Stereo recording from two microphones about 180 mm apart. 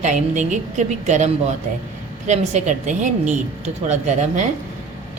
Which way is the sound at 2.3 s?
40° right (ahead or behind).